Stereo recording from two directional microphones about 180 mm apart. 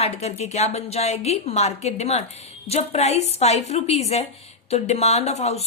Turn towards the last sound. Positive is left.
turn(degrees=35)  # may be behind; listen again after turning